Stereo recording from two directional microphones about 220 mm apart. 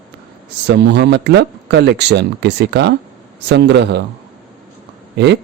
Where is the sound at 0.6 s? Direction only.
50° right (ahead or behind).